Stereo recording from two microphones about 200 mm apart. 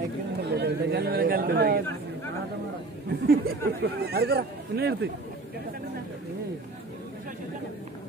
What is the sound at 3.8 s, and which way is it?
Speech, 50° right (ahead or behind).